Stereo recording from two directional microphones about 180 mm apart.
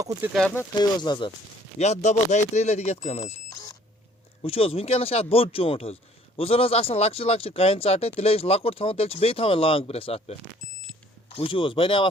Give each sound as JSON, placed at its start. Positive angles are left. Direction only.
{"t": 0.0, "sound": "speech", "side_deg": -15}
{"t": 0.3, "sound": "speech", "side_deg": 10}
{"t": 0.8, "sound": "speech", "side_deg": 25}
{"t": 1.8, "sound": "speech", "side_deg": 40}
{"t": 4.4, "sound": "speech", "side_deg": 30}